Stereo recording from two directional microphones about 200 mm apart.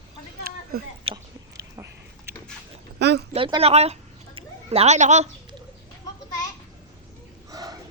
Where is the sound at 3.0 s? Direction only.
55° right (ahead or behind).